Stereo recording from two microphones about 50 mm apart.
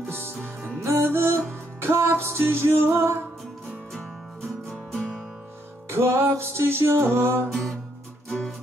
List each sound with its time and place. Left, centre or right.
0.0 s music: right
0.7 s music: right
3.9 s music: centre
5.9 s music: right
8.3 s music: centre